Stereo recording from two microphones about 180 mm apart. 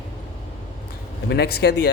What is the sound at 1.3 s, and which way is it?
Speech, 65° left (ahead or behind).